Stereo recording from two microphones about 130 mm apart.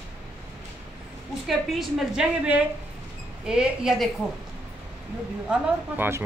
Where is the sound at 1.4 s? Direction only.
Centre (ahead or behind).